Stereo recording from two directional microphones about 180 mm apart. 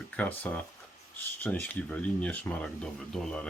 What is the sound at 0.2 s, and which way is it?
Speech, 10° left (ahead or behind).